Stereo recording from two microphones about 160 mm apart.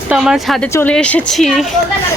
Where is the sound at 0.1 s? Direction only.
Centre (ahead or behind).